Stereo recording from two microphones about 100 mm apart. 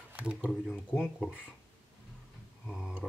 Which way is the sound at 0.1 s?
10° right (ahead or behind).